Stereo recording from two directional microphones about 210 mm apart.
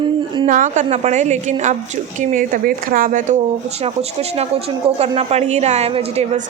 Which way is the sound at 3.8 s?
30° right (ahead or behind).